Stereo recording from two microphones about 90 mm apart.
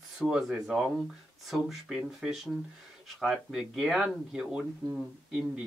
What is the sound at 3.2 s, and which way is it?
Speech, centre (ahead or behind).